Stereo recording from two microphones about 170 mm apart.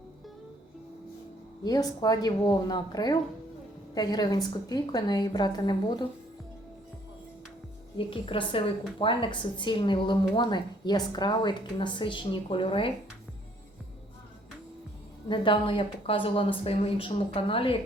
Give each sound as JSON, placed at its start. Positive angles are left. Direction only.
{"t": 1.6, "sound": "a woman's voice", "side_deg": 20}
{"t": 7.9, "sound": "a woman's voice", "side_deg": 30}
{"t": 15.3, "sound": "speech", "side_deg": 30}